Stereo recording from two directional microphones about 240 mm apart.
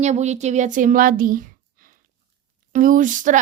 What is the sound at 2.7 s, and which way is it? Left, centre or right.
Speech, right.